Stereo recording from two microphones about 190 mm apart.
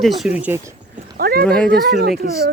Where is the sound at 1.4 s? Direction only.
5° left (ahead or behind).